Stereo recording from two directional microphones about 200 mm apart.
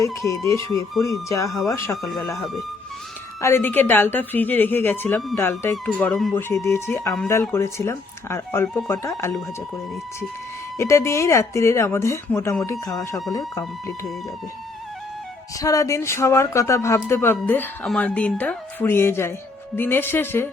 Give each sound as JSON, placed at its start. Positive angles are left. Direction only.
{"t": 0.0, "sound": "speech", "side_deg": 15}
{"t": 2.3, "sound": "speech", "side_deg": 0}
{"t": 3.4, "sound": "speech", "side_deg": 10}
{"t": 10.8, "sound": "speech", "side_deg": 15}
{"t": 15.5, "sound": "speech", "side_deg": 15}